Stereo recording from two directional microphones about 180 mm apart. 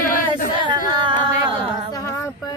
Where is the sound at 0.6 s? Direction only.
25° right (ahead or behind).